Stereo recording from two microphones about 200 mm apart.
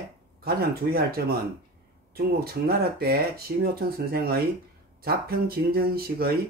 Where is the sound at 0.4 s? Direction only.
50° right (ahead or behind).